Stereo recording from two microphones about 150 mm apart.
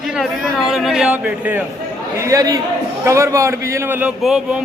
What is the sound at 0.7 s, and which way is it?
Speech, 5° right (ahead or behind).